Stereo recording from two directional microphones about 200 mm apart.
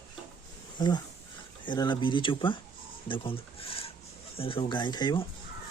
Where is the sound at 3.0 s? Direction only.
25° left (ahead or behind).